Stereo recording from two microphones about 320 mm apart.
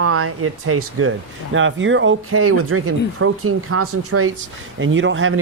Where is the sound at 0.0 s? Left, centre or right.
Right.